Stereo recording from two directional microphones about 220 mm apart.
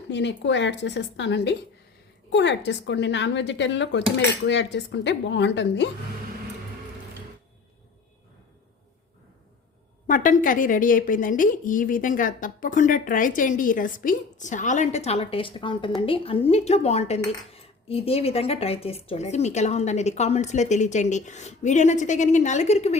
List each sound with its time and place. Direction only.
0.1 s speech: 55° left (ahead or behind)
10.1 s a woman's voice: 35° left (ahead or behind)